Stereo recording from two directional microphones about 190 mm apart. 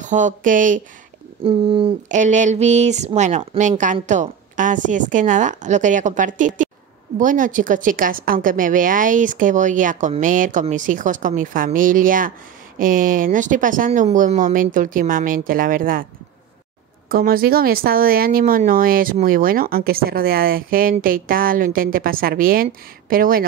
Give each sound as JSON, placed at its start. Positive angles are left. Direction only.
{"t": 0.0, "sound": "a woman's voice", "side_deg": -40}
{"t": 1.4, "sound": "speech", "side_deg": -30}
{"t": 2.0, "sound": "a woman's voice", "side_deg": -40}
{"t": 17.1, "sound": "a woman's voice", "side_deg": -50}